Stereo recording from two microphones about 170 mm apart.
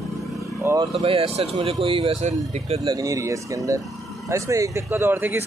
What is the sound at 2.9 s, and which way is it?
Speech, 20° right (ahead or behind).